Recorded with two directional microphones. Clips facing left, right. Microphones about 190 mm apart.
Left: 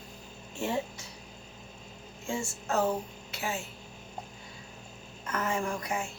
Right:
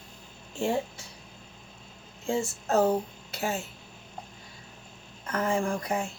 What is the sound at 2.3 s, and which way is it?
Speech, 35° right (ahead or behind).